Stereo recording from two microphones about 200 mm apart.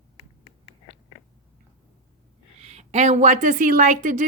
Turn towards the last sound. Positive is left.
turn(degrees=-40)  # may be behind; listen again after turning